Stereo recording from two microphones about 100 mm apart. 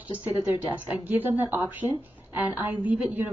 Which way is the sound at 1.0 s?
20° right (ahead or behind).